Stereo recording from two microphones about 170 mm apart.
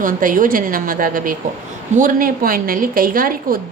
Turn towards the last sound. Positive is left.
turn(degrees=-55)  # may be behind; listen again after turning